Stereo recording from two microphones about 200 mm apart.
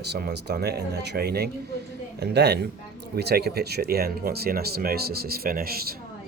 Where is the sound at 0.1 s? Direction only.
55° right (ahead or behind).